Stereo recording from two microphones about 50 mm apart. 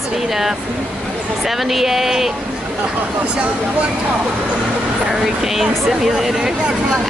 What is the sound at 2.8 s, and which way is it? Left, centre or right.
Speech, right.